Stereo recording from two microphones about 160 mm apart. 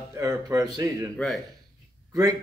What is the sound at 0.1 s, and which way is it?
Speech, 20° right (ahead or behind).